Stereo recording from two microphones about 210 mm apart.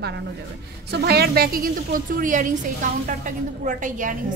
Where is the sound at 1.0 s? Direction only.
50° right (ahead or behind).